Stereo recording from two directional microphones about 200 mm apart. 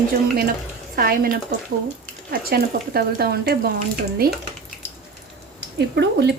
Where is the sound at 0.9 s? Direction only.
45° right (ahead or behind).